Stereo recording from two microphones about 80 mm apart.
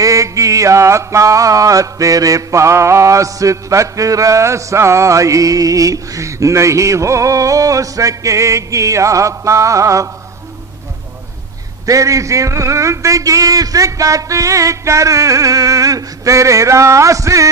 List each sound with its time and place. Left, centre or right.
0.0 s mantra: right
11.8 s mantra: right